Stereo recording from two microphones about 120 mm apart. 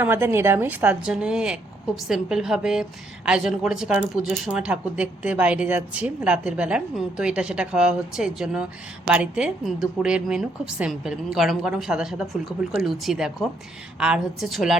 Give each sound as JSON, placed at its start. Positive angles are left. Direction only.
{"t": 0.0, "sound": "a woman's voice", "side_deg": -20}